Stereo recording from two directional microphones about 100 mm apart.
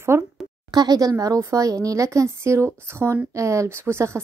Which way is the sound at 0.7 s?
40° right (ahead or behind).